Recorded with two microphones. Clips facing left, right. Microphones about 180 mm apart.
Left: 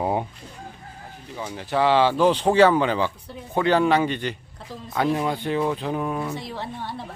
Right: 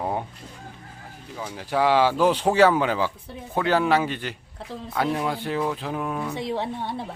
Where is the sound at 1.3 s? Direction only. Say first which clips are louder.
Left 1 dB; centre (ahead or behind).